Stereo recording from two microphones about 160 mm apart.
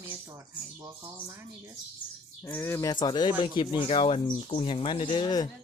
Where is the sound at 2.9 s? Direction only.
30° left (ahead or behind).